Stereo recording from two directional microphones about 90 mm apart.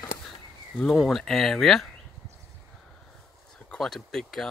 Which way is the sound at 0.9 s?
Centre (ahead or behind).